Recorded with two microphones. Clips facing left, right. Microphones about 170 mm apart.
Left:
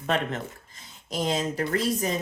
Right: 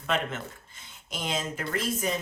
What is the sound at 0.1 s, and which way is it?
Speech, 35° left (ahead or behind).